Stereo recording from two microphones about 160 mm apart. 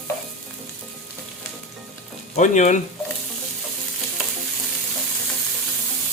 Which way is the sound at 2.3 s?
50° left (ahead or behind).